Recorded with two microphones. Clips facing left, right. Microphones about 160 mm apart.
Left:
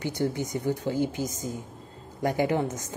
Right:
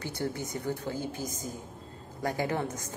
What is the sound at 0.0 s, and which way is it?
Speech, 15° left (ahead or behind).